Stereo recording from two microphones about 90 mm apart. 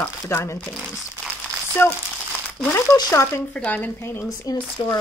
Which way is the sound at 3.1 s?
30° left (ahead or behind).